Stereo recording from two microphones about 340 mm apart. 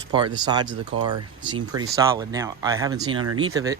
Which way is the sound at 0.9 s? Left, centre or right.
Right.